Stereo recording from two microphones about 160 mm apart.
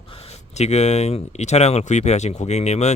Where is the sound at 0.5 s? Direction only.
45° left (ahead or behind).